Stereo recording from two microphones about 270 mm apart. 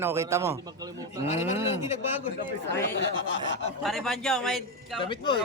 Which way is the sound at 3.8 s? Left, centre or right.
Centre.